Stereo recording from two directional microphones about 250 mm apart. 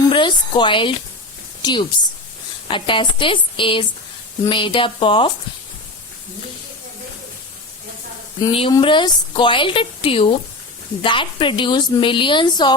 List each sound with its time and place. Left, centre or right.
0.1 s a woman's voice: centre
8.4 s a woman's voice: centre